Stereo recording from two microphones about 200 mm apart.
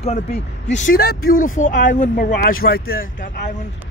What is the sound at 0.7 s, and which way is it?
Speech, 45° left (ahead or behind).